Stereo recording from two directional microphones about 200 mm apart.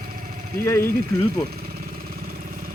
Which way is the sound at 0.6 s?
15° left (ahead or behind).